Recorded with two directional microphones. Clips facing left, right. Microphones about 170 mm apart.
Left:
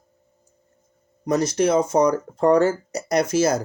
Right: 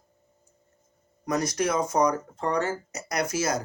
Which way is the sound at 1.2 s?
30° left (ahead or behind).